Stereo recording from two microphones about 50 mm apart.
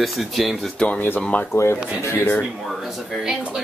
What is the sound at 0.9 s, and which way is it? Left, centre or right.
Speech, left.